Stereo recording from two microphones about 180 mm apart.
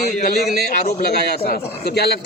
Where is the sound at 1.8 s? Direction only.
65° left (ahead or behind).